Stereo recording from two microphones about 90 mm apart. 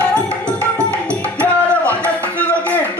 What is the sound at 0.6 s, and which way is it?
Music, 15° left (ahead or behind).